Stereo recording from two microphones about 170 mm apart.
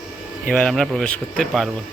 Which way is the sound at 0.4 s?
5° left (ahead or behind).